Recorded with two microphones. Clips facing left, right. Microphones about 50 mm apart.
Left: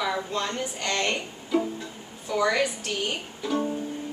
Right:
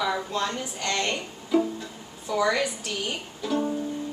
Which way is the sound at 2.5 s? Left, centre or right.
Centre.